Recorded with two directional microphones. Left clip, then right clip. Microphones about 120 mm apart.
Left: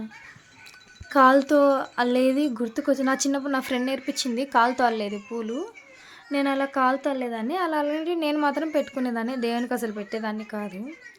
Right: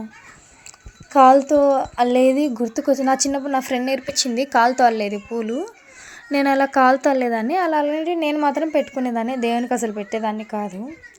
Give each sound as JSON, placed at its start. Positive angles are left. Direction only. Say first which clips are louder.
{"t": 1.1, "sound": "speech", "louder": "right 6 dB", "side_deg": -15}
{"t": 1.4, "sound": "speech", "louder": "right 4 dB", "side_deg": 0}
{"t": 4.0, "sound": "a woman's voice", "louder": "right 6 dB", "side_deg": -25}
{"t": 6.3, "sound": "a woman's voice", "louder": "right 8 dB", "side_deg": -35}